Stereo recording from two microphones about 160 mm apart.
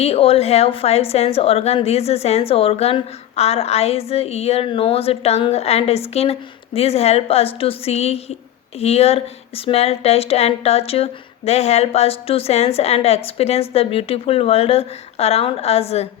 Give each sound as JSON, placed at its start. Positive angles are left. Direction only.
{"t": 0.0, "sound": "speech", "side_deg": 40}